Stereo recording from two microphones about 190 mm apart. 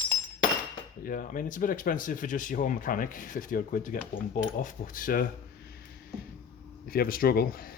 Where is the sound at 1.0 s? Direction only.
45° left (ahead or behind).